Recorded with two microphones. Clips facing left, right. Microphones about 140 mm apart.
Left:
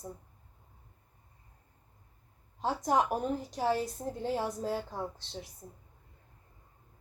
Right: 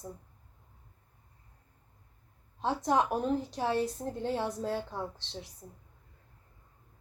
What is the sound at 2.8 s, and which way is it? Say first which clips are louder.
A woman's voice: right 1 dB; 10° left (ahead or behind).